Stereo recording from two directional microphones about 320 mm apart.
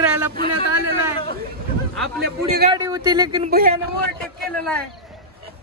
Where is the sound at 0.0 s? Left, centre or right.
Centre.